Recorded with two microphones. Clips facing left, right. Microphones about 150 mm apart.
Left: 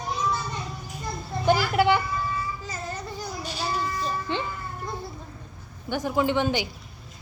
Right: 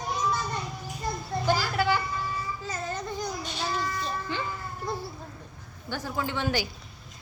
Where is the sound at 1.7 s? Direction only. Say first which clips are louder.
Left 5 dB; 20° left (ahead or behind).